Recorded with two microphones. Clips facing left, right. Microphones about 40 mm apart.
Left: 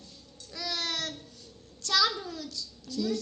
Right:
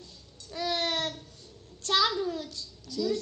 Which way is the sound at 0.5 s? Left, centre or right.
Right.